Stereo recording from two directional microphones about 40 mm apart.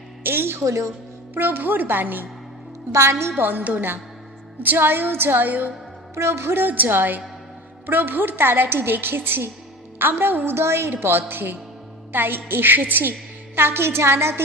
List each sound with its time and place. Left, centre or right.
0.2 s a woman's voice: right
1.3 s a woman's voice: right
6.2 s a woman's voice: right
6.7 s a woman's voice: right
8.4 s a woman's voice: right
11.0 s a woman's voice: right
13.6 s a woman's voice: right